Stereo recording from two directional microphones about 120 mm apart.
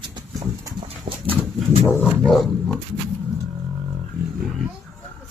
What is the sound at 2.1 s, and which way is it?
Roar, centre (ahead or behind).